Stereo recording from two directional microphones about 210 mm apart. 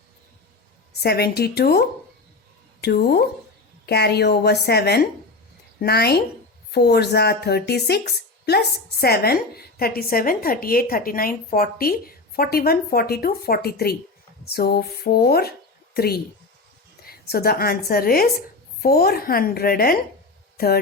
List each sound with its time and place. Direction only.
0.9 s speech: 50° left (ahead or behind)